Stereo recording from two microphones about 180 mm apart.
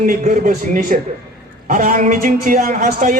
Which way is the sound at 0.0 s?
45° right (ahead or behind).